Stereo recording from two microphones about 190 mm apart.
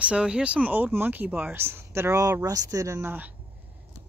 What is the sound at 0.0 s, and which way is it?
Speech, 5° right (ahead or behind).